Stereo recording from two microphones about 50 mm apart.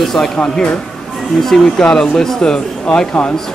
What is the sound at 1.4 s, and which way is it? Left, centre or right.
Speech, centre.